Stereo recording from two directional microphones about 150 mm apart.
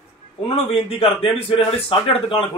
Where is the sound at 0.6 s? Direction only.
40° left (ahead or behind).